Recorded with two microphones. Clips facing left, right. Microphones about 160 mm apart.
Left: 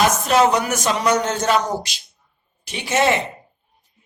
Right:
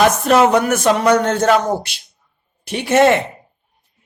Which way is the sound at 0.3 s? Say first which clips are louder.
Right 4 dB; 55° right (ahead or behind).